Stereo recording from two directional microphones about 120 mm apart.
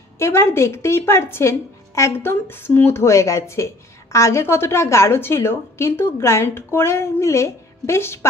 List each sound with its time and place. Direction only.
0.2 s a woman's voice: 20° left (ahead or behind)